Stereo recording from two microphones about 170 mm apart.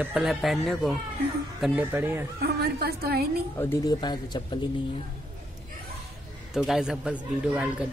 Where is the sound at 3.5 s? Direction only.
15° left (ahead or behind).